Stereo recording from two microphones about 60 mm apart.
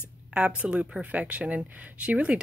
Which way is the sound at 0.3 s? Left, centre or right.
Centre.